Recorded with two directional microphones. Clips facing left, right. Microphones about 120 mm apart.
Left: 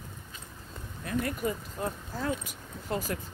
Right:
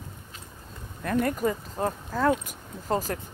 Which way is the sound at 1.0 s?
50° right (ahead or behind).